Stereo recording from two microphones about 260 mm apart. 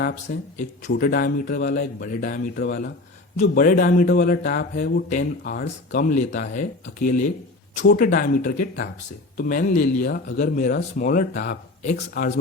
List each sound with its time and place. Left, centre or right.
0.3 s speech: left